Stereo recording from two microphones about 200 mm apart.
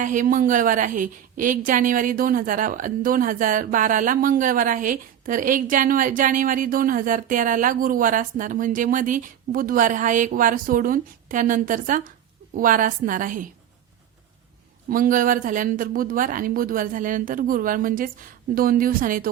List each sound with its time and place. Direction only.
0.0 s a woman's voice: 40° right (ahead or behind)
14.8 s speech: 45° right (ahead or behind)